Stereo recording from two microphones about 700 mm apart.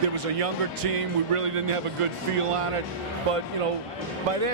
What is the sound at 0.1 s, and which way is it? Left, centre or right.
Speech, right.